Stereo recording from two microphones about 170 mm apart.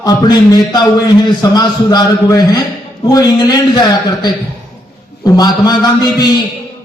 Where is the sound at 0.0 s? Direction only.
25° left (ahead or behind).